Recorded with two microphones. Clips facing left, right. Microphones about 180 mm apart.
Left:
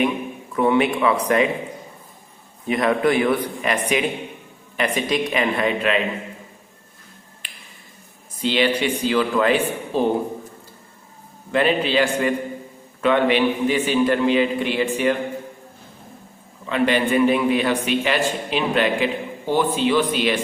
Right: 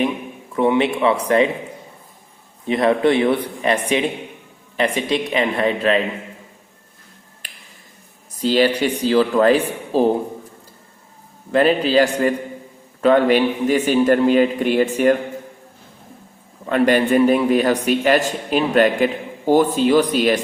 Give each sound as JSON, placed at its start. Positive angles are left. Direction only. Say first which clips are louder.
{"t": 0.5, "sound": "speech", "louder": "right 1 dB", "side_deg": -25}
{"t": 2.6, "sound": "speech", "louder": "right 3 dB", "side_deg": -30}
{"t": 7.4, "sound": "a sound", "louder": "right 2 dB", "side_deg": -45}
{"t": 8.4, "sound": "a man's voice", "louder": "right 4 dB", "side_deg": -40}
{"t": 11.5, "sound": "a man's voice", "louder": "right 4 dB", "side_deg": -40}
{"t": 16.6, "sound": "a man's voice", "louder": "right 4 dB", "side_deg": -45}